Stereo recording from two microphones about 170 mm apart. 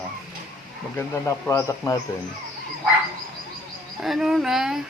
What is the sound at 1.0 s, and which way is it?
Speech, 15° left (ahead or behind).